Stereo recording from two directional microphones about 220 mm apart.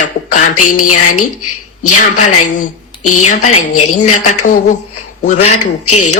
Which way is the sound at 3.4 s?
85° left.